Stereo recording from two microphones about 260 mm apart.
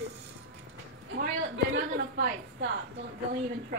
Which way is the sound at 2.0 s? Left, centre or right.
Right.